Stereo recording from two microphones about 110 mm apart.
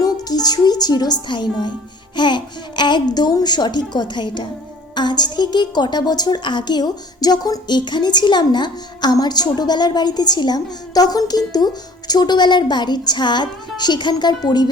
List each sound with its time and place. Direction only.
0.0 s a woman's voice: 35° left (ahead or behind)